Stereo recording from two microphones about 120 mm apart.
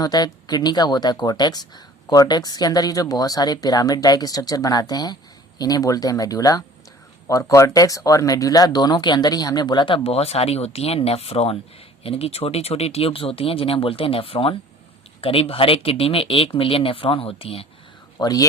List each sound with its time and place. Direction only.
0.0 s speech: 35° left (ahead or behind); by 17.7 s 50° left (ahead or behind)
18.2 s speech: 30° left (ahead or behind)